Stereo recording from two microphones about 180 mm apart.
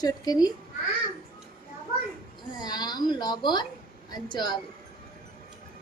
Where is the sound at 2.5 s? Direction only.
20° left (ahead or behind).